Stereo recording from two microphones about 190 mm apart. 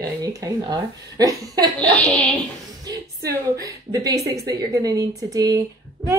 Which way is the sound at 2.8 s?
20° right (ahead or behind).